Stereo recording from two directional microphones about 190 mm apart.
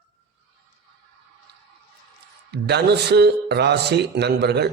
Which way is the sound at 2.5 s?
60° right (ahead or behind).